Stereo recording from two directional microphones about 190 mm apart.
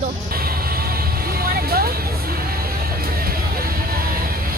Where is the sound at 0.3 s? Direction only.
50° right (ahead or behind).